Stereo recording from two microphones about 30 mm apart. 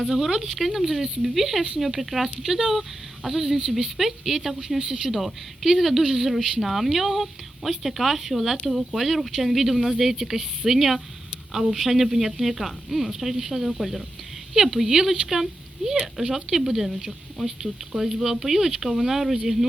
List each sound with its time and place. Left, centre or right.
0.1 s a woman's voice: centre
2.4 s a woman's voice: centre